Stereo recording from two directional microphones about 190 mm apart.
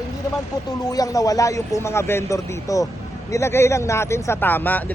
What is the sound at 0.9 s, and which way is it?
Speech, 20° left (ahead or behind).